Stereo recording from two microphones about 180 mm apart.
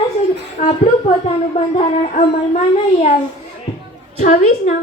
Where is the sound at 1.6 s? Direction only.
40° left (ahead or behind).